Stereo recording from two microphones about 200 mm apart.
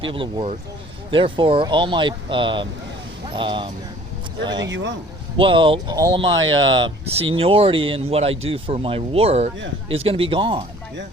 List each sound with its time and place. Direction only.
0.0 s speech: 25° right (ahead or behind)
4.7 s speech: 65° right (ahead or behind)
5.4 s speech: 25° right (ahead or behind)